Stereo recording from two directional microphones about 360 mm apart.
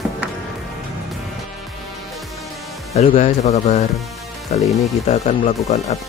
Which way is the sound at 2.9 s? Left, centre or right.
Left.